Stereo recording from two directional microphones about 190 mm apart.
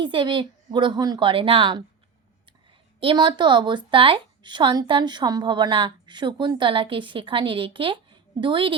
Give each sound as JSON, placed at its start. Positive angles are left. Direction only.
{"t": 0.0, "sound": "a woman's voice", "side_deg": -25}
{"t": 3.0, "sound": "a woman's voice", "side_deg": -25}